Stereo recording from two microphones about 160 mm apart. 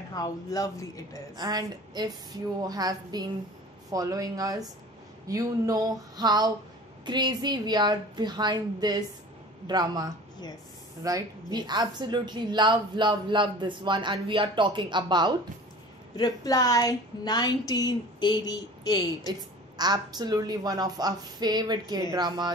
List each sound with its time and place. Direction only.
0.1 s a woman's voice: 20° left (ahead or behind)
1.3 s a woman's voice: 25° right (ahead or behind)
16.2 s a woman's voice: 25° left (ahead or behind)
19.8 s a woman's voice: 25° right (ahead or behind)